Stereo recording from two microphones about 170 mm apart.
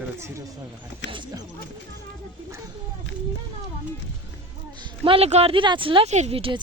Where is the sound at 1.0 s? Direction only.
90° left.